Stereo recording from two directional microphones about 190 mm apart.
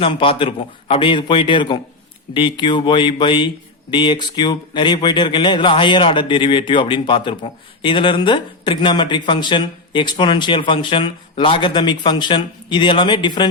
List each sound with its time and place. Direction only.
0.0 s speech: 25° left (ahead or behind)